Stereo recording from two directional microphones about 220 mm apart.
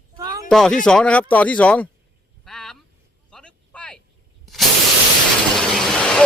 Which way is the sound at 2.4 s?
5° left (ahead or behind).